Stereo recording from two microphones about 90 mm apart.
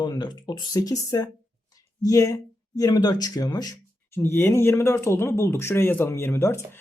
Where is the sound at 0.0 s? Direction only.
50° left (ahead or behind).